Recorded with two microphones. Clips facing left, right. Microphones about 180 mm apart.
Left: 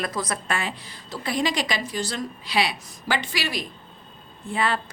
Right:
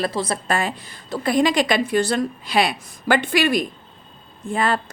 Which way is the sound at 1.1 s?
50° right (ahead or behind).